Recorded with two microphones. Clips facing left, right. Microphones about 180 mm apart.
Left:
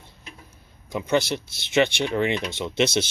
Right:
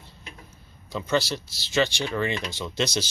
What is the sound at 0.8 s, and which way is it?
Speech, 20° left (ahead or behind).